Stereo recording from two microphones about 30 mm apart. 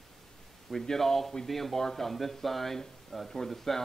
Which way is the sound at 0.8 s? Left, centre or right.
Centre.